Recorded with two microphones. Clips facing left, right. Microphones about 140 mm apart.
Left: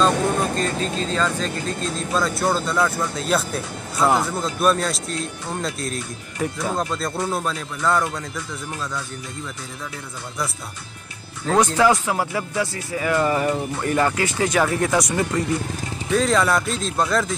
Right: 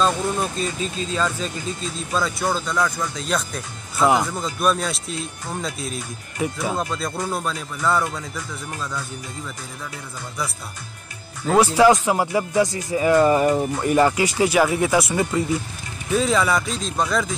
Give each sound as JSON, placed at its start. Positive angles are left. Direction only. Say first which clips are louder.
{"t": 0.1, "sound": "vehicle", "louder": "left 3 dB", "side_deg": 60}
{"t": 0.7, "sound": "speech", "louder": "left 3 dB", "side_deg": 40}
{"t": 1.1, "sound": "speech", "louder": "left 1 dB", "side_deg": -10}
{"t": 11.4, "sound": "speech", "louder": "right 2 dB", "side_deg": -10}